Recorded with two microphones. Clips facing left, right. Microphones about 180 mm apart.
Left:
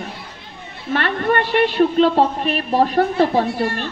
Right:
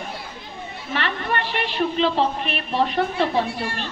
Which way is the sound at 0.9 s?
50° left (ahead or behind).